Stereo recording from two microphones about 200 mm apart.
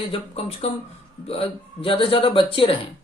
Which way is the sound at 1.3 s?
25° left (ahead or behind).